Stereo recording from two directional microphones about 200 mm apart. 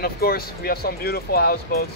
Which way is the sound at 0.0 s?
50° left (ahead or behind).